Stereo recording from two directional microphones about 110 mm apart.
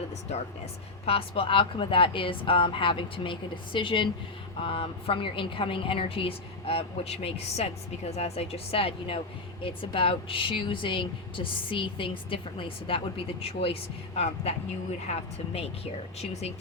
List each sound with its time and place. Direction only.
1.0 s a woman's voice: 60° left (ahead or behind)
14.5 s speech: 75° left (ahead or behind)